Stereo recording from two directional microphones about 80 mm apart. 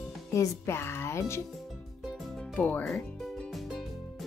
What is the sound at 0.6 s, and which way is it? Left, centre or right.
Speech, left.